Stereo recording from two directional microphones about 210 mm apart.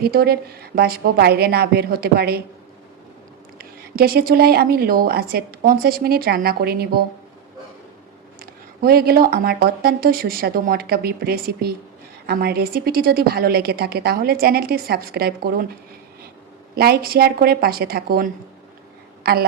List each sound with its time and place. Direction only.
0.0 s a woman's voice: 45° right (ahead or behind)
3.6 s a woman's voice: 45° right (ahead or behind)
8.4 s a woman's voice: 45° right (ahead or behind)
16.7 s a woman's voice: 50° right (ahead or behind)
19.2 s a sound: 45° right (ahead or behind)